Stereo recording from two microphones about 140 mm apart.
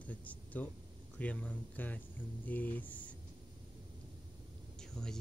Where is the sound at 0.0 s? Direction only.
10° left (ahead or behind).